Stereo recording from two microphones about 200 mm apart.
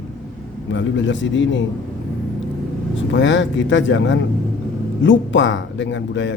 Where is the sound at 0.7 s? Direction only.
65° left (ahead or behind).